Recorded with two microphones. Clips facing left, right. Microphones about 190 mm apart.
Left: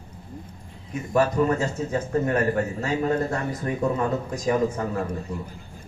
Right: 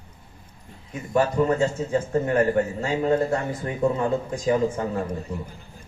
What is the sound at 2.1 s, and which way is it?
A man's voice, 30° right (ahead or behind).